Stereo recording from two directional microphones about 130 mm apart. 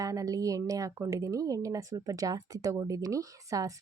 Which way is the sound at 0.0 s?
25° right (ahead or behind).